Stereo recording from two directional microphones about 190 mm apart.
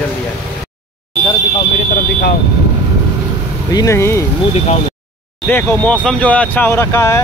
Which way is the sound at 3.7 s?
15° left (ahead or behind).